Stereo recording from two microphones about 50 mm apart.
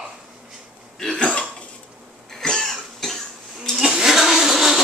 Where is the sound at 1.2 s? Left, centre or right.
Left; by 3.1 s centre.